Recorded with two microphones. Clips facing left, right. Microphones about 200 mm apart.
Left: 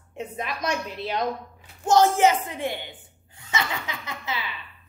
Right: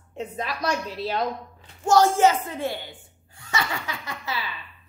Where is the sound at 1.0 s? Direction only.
15° left (ahead or behind).